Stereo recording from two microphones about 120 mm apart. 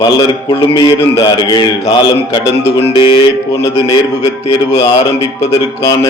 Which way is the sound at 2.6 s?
55° left (ahead or behind).